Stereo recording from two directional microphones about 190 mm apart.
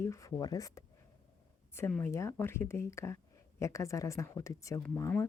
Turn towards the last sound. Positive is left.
turn(degrees=15)  # may be behind; listen again after turning